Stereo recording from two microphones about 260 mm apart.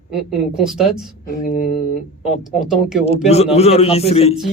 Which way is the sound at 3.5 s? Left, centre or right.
Left.